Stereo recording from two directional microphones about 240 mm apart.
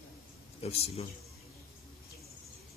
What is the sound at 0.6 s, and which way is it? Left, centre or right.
Speech, left.